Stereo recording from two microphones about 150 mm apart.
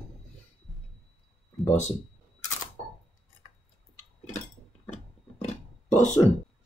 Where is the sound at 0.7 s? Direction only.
Centre (ahead or behind).